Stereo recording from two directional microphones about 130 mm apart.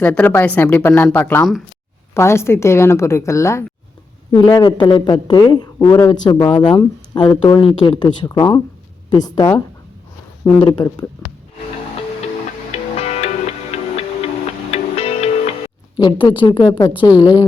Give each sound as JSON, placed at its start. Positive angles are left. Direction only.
{"t": 0.0, "sound": "a woman's voice", "side_deg": 15}
{"t": 13.0, "sound": "music", "side_deg": 55}
{"t": 16.0, "sound": "a man's voice", "side_deg": 40}